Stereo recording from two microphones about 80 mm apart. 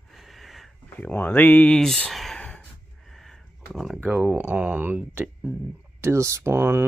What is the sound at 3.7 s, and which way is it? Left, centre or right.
Speech, centre.